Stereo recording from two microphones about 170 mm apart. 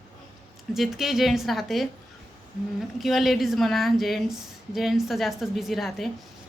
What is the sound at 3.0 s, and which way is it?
A woman's voice, centre (ahead or behind).